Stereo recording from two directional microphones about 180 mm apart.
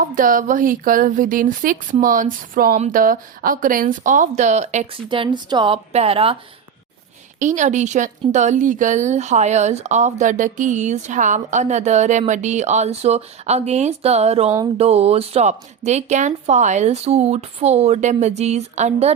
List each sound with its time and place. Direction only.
0.0 s a woman's voice: 50° right (ahead or behind)
5.0 s speech: 25° right (ahead or behind)
7.3 s a woman's voice: 45° right (ahead or behind)